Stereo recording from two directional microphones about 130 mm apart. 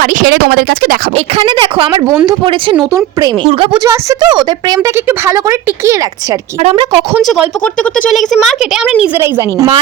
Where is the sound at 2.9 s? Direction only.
25° right (ahead or behind).